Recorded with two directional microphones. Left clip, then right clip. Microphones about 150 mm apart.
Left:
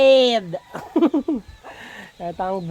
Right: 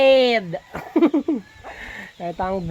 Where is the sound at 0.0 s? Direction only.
5° right (ahead or behind).